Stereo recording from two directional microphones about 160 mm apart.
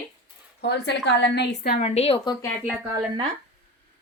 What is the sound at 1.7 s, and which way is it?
Speech, 40° left (ahead or behind).